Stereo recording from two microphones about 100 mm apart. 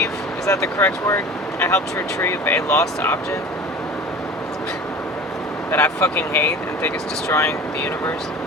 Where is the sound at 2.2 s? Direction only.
20° left (ahead or behind).